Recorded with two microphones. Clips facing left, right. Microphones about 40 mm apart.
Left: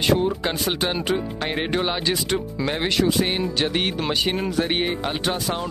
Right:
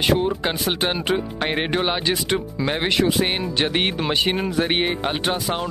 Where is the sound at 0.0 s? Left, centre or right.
Centre.